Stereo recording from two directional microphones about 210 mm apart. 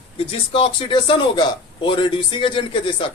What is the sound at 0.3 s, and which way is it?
Speech, 25° left (ahead or behind).